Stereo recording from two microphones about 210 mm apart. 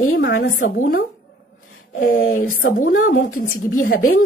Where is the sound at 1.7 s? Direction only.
80° left.